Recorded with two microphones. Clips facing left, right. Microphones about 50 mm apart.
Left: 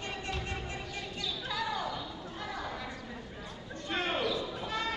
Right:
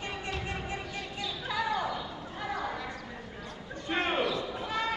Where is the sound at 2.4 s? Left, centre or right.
Centre.